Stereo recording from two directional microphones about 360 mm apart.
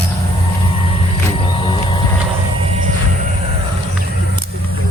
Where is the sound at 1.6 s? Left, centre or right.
Centre.